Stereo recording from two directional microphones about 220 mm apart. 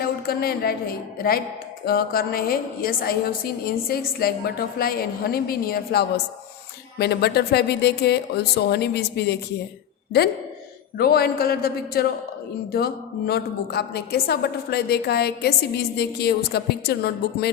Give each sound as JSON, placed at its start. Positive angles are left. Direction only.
{"t": 0.0, "sound": "a woman's voice", "side_deg": 45}
{"t": 10.9, "sound": "a woman's voice", "side_deg": 45}